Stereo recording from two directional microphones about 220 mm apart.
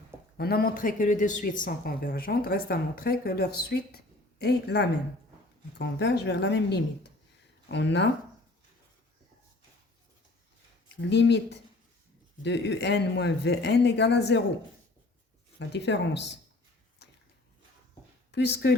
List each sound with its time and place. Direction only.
0.3 s speech: 45° left (ahead or behind)
11.0 s speech: 50° left (ahead or behind)
15.5 s speech: 50° left (ahead or behind)
18.3 s speech: 50° left (ahead or behind)